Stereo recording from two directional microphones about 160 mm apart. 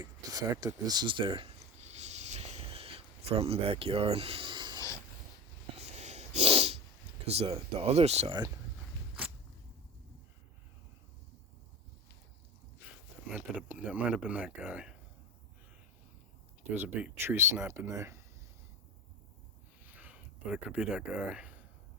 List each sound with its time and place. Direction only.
0.0 s a sound: 20° right (ahead or behind)
5.7 s sneeze: 45° right (ahead or behind)
7.3 s speech: 40° right (ahead or behind)
13.2 s speech: 5° right (ahead or behind)
16.7 s speech: 10° right (ahead or behind)
19.8 s a sound: 10° right (ahead or behind)